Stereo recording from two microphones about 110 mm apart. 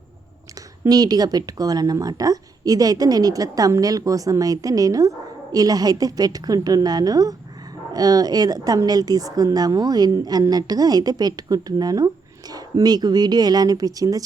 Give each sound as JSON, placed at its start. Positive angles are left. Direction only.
{"t": 0.9, "sound": "a woman's voice", "side_deg": -35}